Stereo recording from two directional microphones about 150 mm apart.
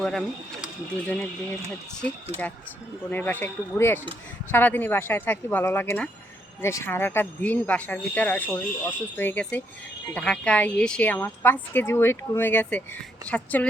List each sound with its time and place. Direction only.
0.0 s speech: 5° left (ahead or behind)
3.1 s speech: 10° left (ahead or behind)